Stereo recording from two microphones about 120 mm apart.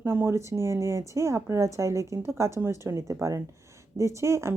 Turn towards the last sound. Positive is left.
turn(degrees=-25)  # may be behind; listen again after turning